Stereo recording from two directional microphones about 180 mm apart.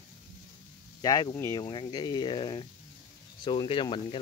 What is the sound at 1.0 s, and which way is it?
Speech, 20° left (ahead or behind).